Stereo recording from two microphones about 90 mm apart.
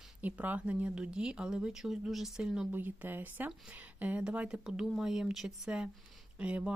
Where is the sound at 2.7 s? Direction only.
20° right (ahead or behind).